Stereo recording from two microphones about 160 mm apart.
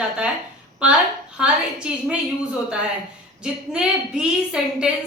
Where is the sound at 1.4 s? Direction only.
5° right (ahead or behind).